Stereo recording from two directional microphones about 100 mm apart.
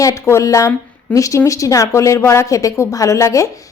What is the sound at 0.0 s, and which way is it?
A woman's voice, 30° left (ahead or behind).